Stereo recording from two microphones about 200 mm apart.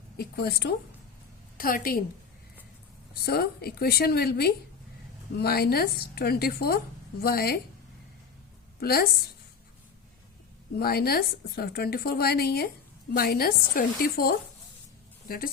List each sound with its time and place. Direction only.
0.2 s a woman's voice: 55° left (ahead or behind)
3.2 s a woman's voice: 50° left (ahead or behind)
8.8 s a woman's voice: 50° left (ahead or behind)
10.8 s a woman's voice: 50° left (ahead or behind)